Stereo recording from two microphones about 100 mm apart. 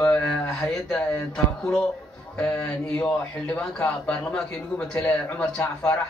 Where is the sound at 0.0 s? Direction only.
10° left (ahead or behind).